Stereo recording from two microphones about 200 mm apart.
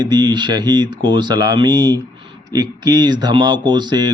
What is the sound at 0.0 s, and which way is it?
Speech, 20° right (ahead or behind).